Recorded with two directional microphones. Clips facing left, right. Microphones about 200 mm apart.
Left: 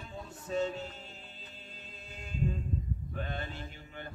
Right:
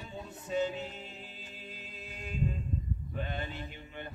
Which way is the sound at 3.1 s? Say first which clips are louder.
Right 1 dB; 10° right (ahead or behind).